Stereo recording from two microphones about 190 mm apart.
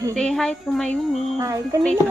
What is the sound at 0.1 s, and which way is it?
A woman's voice, 5° left (ahead or behind).